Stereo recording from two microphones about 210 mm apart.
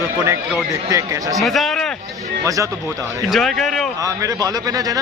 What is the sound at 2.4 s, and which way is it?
Speech, 15° right (ahead or behind).